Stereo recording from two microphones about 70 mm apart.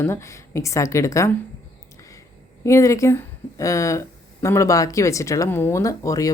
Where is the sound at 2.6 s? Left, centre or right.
Left.